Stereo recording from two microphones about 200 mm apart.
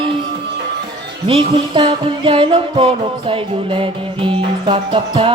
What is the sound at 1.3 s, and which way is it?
Music, 25° right (ahead or behind).